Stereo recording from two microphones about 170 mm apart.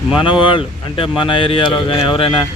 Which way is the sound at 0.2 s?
30° left (ahead or behind).